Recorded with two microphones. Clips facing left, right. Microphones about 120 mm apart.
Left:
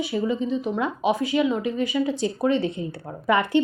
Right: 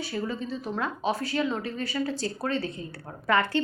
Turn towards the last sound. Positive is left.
turn(degrees=20)  # may be behind; listen again after turning